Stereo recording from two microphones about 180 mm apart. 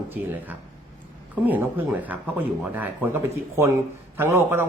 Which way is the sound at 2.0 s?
10° right (ahead or behind).